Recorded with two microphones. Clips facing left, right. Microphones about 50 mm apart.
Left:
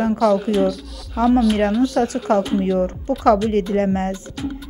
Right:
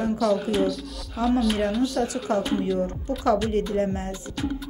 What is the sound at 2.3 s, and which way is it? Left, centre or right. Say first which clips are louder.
Speech: left 6 dB; left.